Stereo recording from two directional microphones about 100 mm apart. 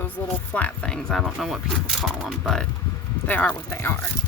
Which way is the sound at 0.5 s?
10° left (ahead or behind).